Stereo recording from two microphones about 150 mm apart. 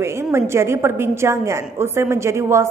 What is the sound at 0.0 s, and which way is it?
A woman's voice, 15° right (ahead or behind).